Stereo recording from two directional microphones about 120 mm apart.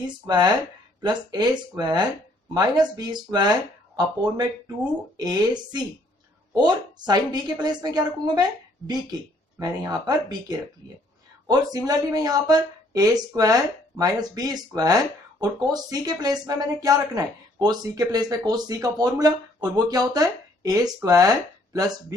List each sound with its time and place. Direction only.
0.0 s speech: 35° right (ahead or behind)